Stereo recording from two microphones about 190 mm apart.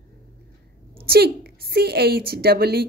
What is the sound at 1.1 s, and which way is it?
Speech, 55° right (ahead or behind).